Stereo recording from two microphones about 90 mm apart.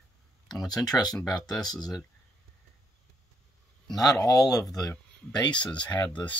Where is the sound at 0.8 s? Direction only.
45° left (ahead or behind).